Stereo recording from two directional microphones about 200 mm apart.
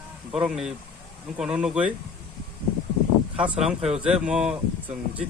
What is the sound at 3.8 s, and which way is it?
Speech, 30° right (ahead or behind).